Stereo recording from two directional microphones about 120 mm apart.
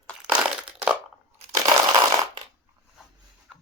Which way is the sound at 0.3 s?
10° right (ahead or behind).